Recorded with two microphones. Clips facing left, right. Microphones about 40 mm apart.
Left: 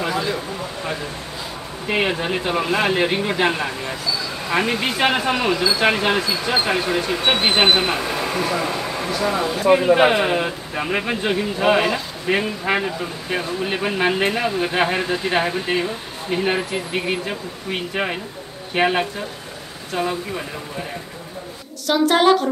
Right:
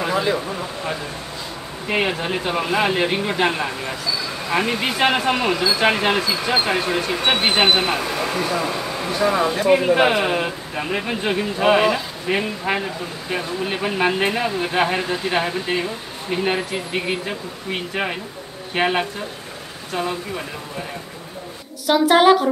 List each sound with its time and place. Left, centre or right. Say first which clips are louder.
0.1 s a sound: right 3 dB; right
1.9 s speech: left 1 dB; centre
8.1 s a sound: even; centre
9.1 s speech: right 3 dB; centre
9.8 s speech: left 1 dB; centre
11.2 s speech: right 1 dB; centre
12.7 s speech: left 2 dB; centre
21.8 s a woman's voice: right 2 dB; centre